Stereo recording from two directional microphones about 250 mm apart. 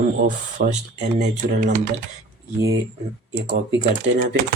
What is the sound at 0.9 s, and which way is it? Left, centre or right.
Speech, right.